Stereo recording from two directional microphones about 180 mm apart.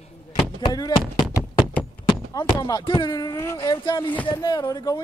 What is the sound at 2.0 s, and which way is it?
Speech, 20° left (ahead or behind).